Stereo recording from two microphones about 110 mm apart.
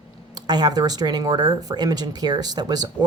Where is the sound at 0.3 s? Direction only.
40° right (ahead or behind).